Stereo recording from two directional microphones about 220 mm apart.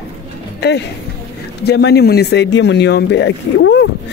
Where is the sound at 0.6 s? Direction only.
50° left (ahead or behind).